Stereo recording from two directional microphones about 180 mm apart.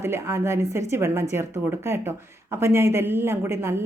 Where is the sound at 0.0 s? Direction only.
15° right (ahead or behind).